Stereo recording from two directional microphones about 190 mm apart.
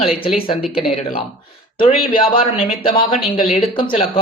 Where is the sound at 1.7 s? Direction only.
25° left (ahead or behind).